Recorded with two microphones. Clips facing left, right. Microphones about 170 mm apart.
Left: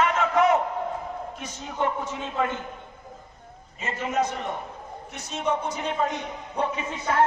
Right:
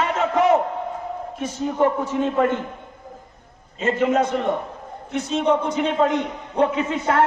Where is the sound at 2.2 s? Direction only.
50° right (ahead or behind).